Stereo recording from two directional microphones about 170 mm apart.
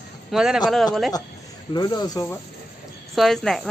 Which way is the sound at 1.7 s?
25° left (ahead or behind).